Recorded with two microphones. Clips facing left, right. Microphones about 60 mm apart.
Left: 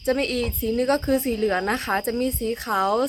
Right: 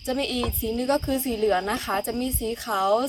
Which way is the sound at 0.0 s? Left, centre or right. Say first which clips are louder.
Left 3 dB; left.